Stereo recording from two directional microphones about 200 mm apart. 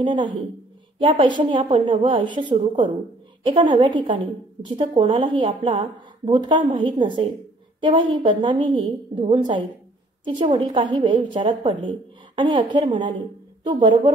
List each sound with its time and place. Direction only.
0.0 s a woman's voice: 25° right (ahead or behind)